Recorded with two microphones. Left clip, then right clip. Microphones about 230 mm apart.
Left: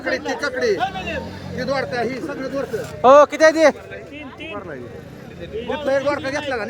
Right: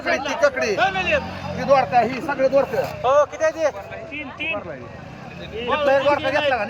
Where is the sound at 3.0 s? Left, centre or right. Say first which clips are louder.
Left 8 dB; left.